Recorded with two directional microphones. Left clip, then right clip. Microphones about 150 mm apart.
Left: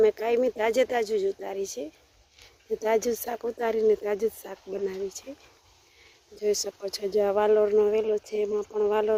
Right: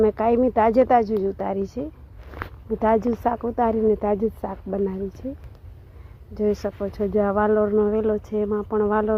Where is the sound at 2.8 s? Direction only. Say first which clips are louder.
Right 6 dB; 15° left (ahead or behind).